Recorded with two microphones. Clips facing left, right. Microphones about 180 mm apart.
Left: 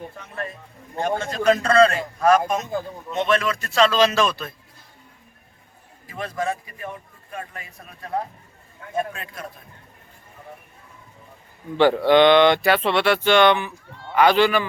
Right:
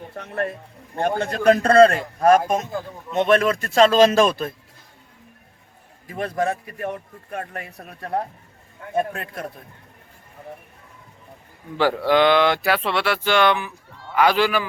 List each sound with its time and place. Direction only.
0.1 s a man's voice: 65° right (ahead or behind)
3.2 s speech: 55° right (ahead or behind)
6.1 s a man's voice: 55° right (ahead or behind)
11.8 s speech: 5° right (ahead or behind)